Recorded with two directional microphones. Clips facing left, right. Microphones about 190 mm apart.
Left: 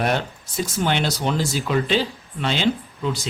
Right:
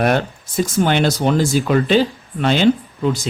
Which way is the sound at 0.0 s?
55° right (ahead or behind).